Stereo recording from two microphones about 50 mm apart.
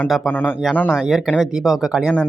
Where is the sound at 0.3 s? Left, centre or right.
Left.